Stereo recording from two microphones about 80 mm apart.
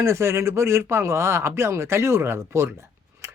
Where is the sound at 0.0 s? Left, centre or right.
Right.